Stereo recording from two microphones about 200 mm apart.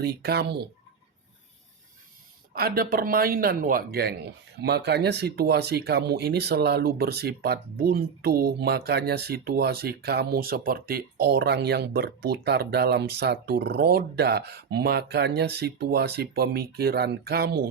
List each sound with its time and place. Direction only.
0.0 s speech: 55° right (ahead or behind)
2.5 s speech: 50° right (ahead or behind)